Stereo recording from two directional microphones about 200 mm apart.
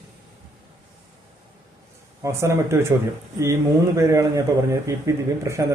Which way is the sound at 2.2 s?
15° right (ahead or behind).